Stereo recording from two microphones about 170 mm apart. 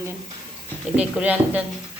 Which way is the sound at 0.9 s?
10° right (ahead or behind).